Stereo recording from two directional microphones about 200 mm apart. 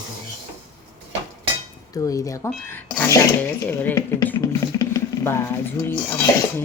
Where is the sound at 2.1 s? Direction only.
15° left (ahead or behind).